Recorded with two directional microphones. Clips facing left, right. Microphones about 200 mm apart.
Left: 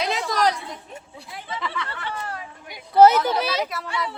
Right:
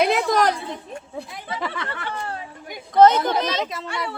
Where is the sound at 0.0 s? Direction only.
55° right (ahead or behind).